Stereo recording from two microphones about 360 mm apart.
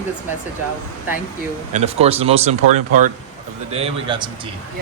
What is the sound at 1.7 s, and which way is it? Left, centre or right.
A man's voice, centre.